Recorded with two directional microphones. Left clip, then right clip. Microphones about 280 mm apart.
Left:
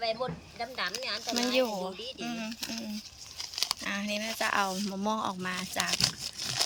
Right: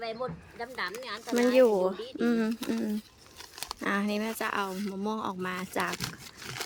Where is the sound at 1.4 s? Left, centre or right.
Centre.